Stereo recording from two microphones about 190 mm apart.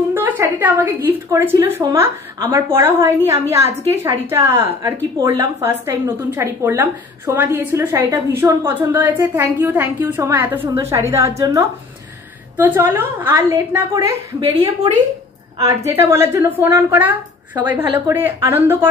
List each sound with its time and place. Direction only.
0.1 s a woman's voice: 10° right (ahead or behind)